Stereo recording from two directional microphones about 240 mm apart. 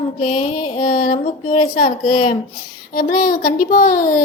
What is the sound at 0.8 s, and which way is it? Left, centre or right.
Speech, left.